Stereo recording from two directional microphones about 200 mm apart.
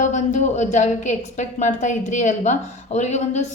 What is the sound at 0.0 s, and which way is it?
A woman's voice, 35° left (ahead or behind).